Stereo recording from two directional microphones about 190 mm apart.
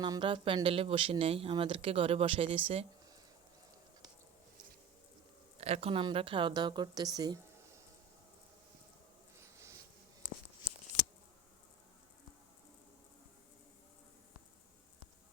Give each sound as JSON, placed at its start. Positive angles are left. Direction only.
{"t": 0.0, "sound": "speech", "side_deg": -25}
{"t": 5.5, "sound": "speech", "side_deg": -30}
{"t": 9.4, "sound": "a sound", "side_deg": -15}